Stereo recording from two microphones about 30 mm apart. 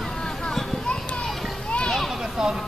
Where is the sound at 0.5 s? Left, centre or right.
Centre.